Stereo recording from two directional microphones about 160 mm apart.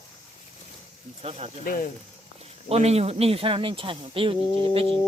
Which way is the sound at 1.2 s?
40° right (ahead or behind).